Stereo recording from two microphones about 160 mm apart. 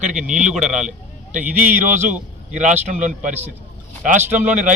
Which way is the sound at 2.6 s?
50° right (ahead or behind).